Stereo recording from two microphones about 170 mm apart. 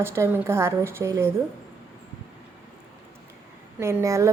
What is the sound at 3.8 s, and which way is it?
Speech, 15° right (ahead or behind).